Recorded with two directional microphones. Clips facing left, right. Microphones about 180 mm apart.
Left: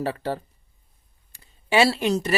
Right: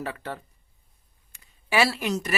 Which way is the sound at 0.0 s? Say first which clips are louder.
Left 7 dB; 30° left (ahead or behind).